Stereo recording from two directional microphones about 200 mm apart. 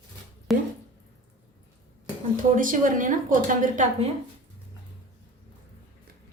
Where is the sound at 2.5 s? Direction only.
40° right (ahead or behind).